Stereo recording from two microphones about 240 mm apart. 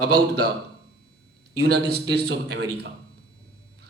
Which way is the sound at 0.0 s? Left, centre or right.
Right.